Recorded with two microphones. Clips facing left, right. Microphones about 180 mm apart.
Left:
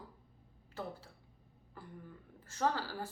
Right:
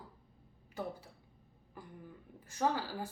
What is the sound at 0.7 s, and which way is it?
Speech, 15° right (ahead or behind).